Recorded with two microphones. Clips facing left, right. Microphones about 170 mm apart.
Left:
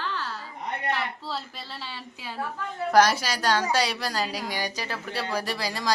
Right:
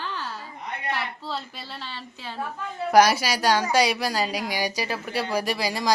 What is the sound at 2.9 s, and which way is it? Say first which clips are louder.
A woman's voice: right 3 dB; 10° right (ahead or behind).